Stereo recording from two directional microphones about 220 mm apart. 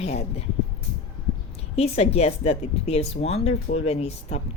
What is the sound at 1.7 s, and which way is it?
Speech, 30° left (ahead or behind).